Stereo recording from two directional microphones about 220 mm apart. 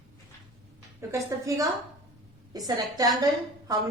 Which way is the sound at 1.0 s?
15° right (ahead or behind).